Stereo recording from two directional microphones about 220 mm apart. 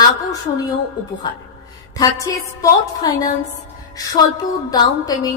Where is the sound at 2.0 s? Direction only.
15° left (ahead or behind).